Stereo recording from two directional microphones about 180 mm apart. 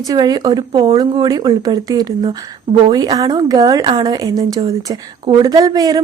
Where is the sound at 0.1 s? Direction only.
20° right (ahead or behind).